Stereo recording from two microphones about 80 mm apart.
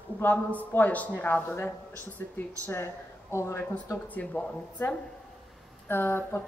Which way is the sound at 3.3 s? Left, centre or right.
Left.